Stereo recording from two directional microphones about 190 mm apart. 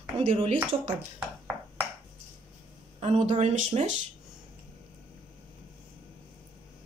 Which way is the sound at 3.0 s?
35° right (ahead or behind).